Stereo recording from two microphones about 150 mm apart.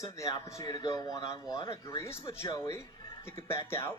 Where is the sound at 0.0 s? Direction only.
20° left (ahead or behind).